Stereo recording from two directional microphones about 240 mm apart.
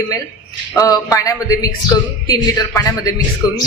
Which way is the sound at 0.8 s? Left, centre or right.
Centre.